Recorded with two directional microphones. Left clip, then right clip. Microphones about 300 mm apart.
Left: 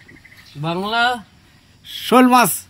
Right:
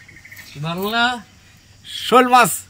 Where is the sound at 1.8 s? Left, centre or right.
Centre.